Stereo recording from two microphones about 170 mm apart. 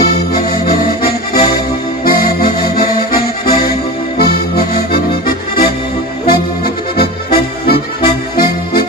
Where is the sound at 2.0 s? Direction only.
60° left (ahead or behind).